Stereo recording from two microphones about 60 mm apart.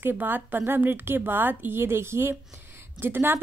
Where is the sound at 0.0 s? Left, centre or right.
Right.